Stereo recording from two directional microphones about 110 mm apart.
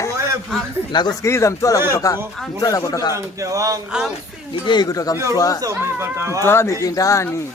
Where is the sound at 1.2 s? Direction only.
25° left (ahead or behind).